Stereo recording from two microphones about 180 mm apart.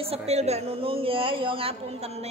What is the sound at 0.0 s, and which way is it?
A woman's voice, 35° right (ahead or behind).